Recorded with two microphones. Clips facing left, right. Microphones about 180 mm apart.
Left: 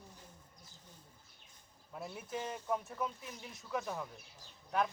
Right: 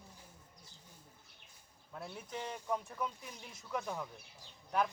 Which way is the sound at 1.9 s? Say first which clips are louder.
Left 2 dB; 5° left (ahead or behind).